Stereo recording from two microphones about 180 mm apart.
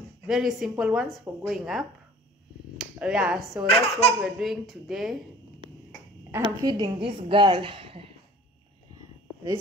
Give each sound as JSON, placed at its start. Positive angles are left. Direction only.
{"t": 0.3, "sound": "a woman's voice", "side_deg": 0}
{"t": 3.6, "sound": "speech", "side_deg": 30}
{"t": 4.2, "sound": "a woman's voice", "side_deg": 0}
{"t": 6.4, "sound": "a woman's voice", "side_deg": -25}